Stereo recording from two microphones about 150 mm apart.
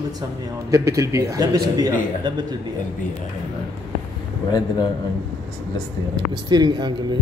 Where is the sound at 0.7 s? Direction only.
20° right (ahead or behind).